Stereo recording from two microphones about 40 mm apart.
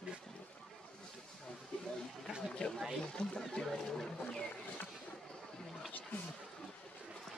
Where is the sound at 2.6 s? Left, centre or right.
Left.